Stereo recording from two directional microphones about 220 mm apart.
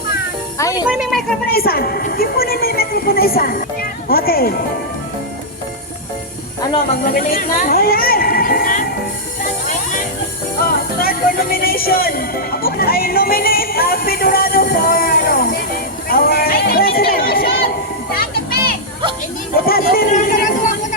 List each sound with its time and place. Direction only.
0.9 s a woman's voice: 5° right (ahead or behind)
1.5 s a woman's voice: 45° left (ahead or behind)
7.1 s speech: 40° left (ahead or behind)
9.4 s music: 35° left (ahead or behind)
16.0 s chatter: 45° left (ahead or behind)
18.1 s music: 40° left (ahead or behind)
19.6 s a sound: 45° left (ahead or behind)